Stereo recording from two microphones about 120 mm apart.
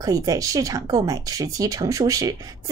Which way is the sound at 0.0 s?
30° right (ahead or behind).